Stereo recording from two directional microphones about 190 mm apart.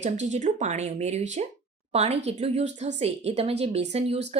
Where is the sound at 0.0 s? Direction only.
40° right (ahead or behind).